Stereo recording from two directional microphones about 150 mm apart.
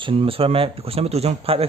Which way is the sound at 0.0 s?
35° right (ahead or behind).